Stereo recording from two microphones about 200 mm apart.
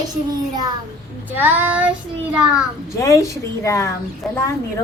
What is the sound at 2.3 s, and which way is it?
Speech, 5° right (ahead or behind).